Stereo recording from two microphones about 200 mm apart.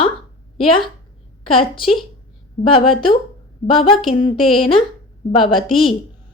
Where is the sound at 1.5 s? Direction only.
25° left (ahead or behind).